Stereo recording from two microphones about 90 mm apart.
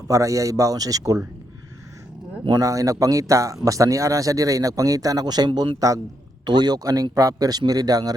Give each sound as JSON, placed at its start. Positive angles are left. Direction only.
{"t": 0.1, "sound": "speech", "side_deg": -35}
{"t": 2.6, "sound": "speech", "side_deg": -40}
{"t": 6.4, "sound": "a man's voice", "side_deg": -55}